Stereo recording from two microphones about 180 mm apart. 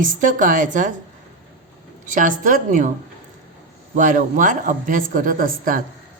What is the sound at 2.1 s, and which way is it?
Speech, 45° right (ahead or behind).